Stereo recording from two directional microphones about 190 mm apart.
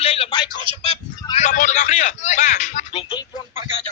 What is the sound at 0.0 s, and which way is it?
Speech, 30° left (ahead or behind).